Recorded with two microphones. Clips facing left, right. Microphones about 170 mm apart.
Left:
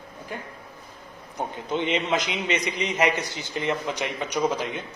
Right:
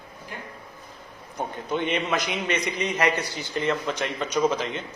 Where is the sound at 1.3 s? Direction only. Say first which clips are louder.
Even; 20° left (ahead or behind).